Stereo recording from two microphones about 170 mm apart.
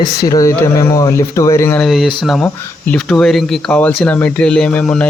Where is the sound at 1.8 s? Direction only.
Centre (ahead or behind).